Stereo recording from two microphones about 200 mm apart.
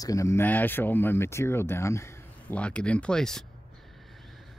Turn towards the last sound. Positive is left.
turn(degrees=5)  # may be behind; listen again after turning